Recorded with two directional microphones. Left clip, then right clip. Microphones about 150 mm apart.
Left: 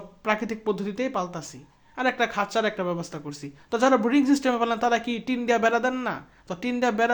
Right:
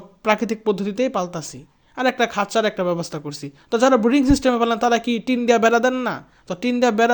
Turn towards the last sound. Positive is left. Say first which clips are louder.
# right 6 dB
turn(degrees=-45)  # may be behind; listen again after turning